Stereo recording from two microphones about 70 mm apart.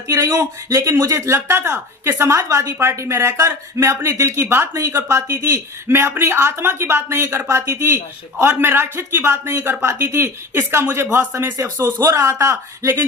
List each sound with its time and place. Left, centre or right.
0.3 s a man's voice: right